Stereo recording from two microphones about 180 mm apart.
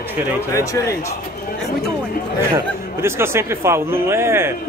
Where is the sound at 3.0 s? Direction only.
15° right (ahead or behind).